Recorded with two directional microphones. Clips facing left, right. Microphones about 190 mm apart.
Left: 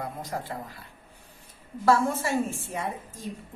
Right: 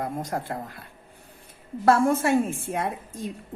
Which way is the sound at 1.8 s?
55° right (ahead or behind).